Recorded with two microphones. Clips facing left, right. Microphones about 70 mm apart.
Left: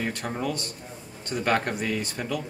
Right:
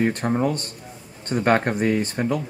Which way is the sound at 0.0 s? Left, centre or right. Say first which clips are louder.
Right 8 dB; right.